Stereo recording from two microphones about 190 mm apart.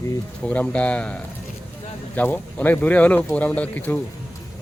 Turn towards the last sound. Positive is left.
turn(degrees=10)  # may be behind; listen again after turning